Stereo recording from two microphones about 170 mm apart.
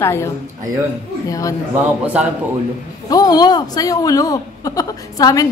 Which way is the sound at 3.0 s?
20° left (ahead or behind).